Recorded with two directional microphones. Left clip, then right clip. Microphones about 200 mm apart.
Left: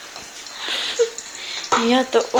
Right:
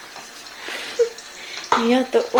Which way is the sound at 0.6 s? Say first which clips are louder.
Left 6 dB; 5° right (ahead or behind).